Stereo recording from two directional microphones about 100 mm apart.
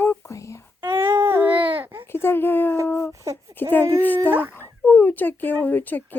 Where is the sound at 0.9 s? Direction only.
25° right (ahead or behind).